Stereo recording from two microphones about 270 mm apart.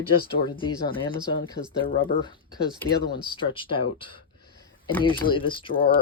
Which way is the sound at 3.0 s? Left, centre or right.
Left.